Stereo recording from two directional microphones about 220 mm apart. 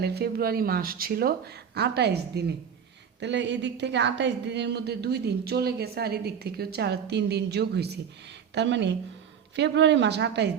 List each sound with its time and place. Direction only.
0.0 s a woman's voice: 45° right (ahead or behind)